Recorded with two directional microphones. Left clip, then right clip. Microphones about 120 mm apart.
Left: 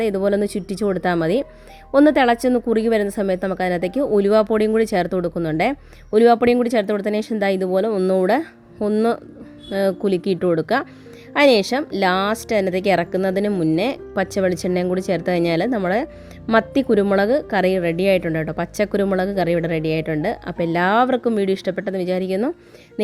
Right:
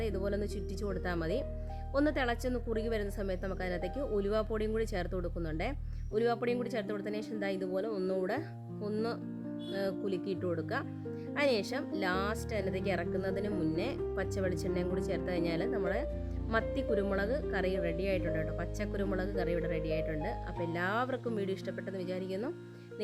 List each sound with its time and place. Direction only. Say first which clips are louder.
0.0 s a woman's voice: left 16 dB; 25° left (ahead or behind)